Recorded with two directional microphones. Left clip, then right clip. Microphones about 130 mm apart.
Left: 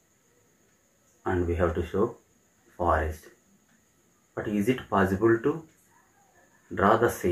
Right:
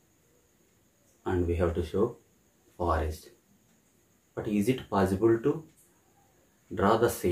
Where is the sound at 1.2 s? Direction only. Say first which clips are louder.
Left 2 dB; 15° right (ahead or behind).